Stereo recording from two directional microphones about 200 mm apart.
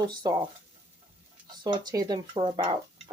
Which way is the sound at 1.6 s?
20° right (ahead or behind).